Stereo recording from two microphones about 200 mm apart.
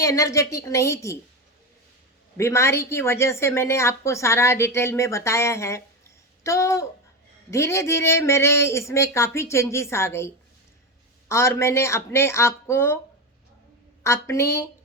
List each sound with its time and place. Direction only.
0.0 s a woman's voice: 15° left (ahead or behind)
2.4 s a woman's voice: 15° left (ahead or behind)
14.0 s a woman's voice: 15° left (ahead or behind)